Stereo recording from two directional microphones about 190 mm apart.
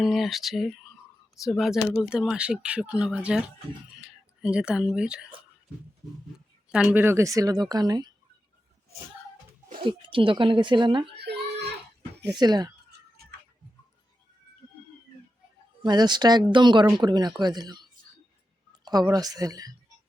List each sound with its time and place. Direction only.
0.0 s speech: centre (ahead or behind)
6.7 s a woman's voice: 5° right (ahead or behind); by 8.1 s 20° right (ahead or behind)
9.8 s speech: 25° right (ahead or behind)
11.2 s a sound: 60° right (ahead or behind)
12.3 s speech: 20° right (ahead or behind)
15.8 s speech: 20° right (ahead or behind)